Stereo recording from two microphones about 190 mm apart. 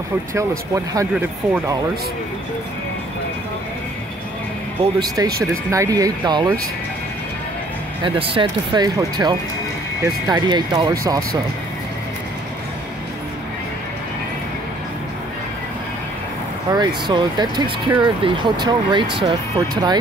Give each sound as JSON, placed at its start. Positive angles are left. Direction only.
{"t": 0.3, "sound": "speech", "side_deg": -15}
{"t": 5.0, "sound": "speech", "side_deg": -20}
{"t": 8.0, "sound": "speech", "side_deg": -25}
{"t": 16.7, "sound": "speech", "side_deg": -20}